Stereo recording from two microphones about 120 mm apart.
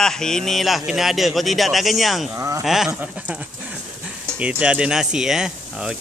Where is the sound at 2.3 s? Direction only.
25° right (ahead or behind).